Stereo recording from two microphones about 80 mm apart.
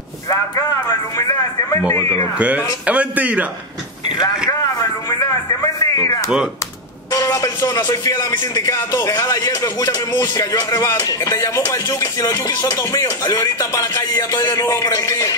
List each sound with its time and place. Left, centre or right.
0.3 s music: left
2.3 s a man's voice: centre
5.5 s a sound: left
7.1 s speech: left
8.4 s music: left